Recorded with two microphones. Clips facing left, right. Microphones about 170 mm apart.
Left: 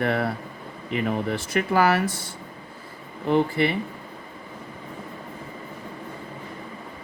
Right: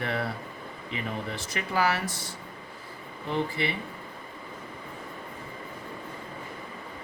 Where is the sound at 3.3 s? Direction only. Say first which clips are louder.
Left 8 dB; 55° left (ahead or behind).